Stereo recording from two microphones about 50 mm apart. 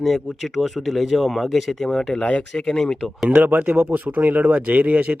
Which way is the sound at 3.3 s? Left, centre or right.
Right.